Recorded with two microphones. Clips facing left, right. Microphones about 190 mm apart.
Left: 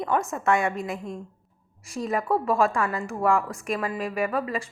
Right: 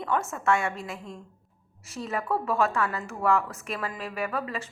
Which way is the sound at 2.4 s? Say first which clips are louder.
Left 3 dB; 10° left (ahead or behind).